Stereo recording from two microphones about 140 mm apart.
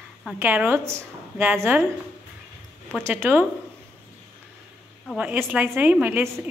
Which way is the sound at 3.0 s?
15° right (ahead or behind).